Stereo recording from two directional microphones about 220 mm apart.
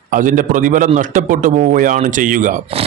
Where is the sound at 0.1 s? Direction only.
35° right (ahead or behind).